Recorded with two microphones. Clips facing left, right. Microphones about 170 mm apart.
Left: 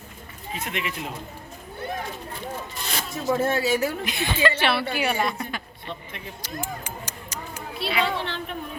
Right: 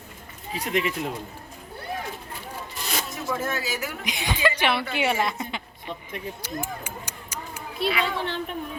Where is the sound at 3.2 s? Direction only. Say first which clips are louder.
Left 8 dB; 30° left (ahead or behind).